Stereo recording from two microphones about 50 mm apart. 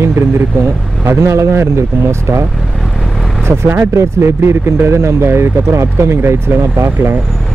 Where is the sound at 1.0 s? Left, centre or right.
Right.